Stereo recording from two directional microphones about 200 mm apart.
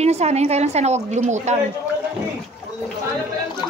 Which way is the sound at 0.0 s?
35° right (ahead or behind).